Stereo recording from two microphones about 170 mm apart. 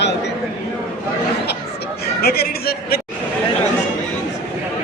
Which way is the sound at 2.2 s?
65° left (ahead or behind).